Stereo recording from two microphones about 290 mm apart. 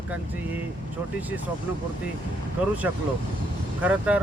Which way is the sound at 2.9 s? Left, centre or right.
Centre.